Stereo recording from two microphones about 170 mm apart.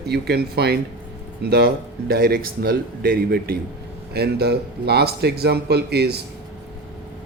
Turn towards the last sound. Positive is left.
turn(degrees=-70)  # may be behind; listen again after turning